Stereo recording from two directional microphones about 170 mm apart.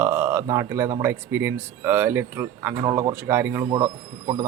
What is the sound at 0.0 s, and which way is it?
Speech, 10° right (ahead or behind).